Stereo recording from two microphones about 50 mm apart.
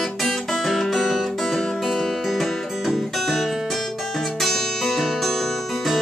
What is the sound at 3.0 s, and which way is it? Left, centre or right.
Guitar, centre.